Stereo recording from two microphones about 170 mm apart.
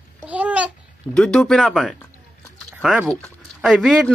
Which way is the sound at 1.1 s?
5° left (ahead or behind).